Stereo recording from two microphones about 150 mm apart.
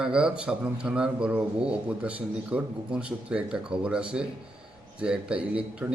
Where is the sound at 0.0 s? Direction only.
5° right (ahead or behind).